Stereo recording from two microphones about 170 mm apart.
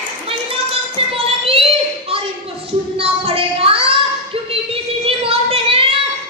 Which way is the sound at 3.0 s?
35° right (ahead or behind).